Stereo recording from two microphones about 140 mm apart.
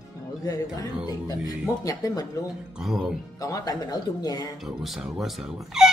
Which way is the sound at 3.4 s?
25° left (ahead or behind).